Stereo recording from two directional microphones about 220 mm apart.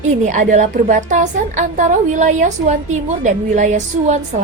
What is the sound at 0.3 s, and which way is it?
A woman's voice, 35° right (ahead or behind).